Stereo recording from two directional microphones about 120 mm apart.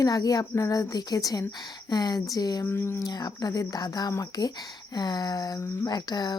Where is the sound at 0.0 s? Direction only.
30° left (ahead or behind).